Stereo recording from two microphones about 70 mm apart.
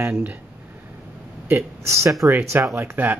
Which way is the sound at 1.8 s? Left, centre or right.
Right.